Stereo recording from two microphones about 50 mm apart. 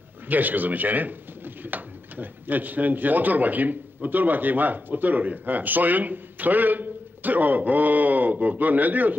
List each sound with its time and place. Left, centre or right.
0.3 s speech: right